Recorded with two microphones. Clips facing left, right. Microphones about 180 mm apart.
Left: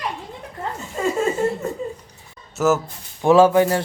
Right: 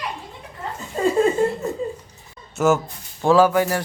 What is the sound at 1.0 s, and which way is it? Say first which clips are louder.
Chuckle: right 2 dB; 35° right (ahead or behind).